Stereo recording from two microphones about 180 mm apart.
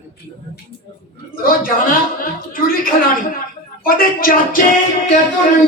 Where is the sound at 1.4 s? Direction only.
50° left (ahead or behind).